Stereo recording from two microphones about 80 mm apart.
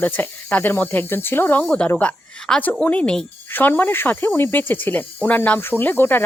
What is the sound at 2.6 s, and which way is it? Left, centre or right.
Speech, left.